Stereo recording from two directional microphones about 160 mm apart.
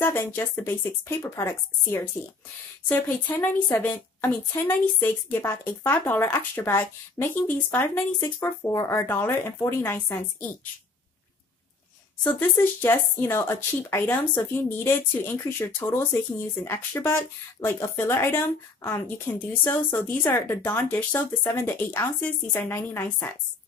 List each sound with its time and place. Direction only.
0.0 s a woman's voice: 15° left (ahead or behind)
12.2 s a woman's voice: 10° left (ahead or behind)